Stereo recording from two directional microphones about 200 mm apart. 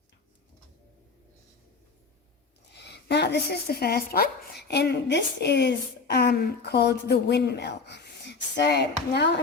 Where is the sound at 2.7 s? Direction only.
55° left (ahead or behind).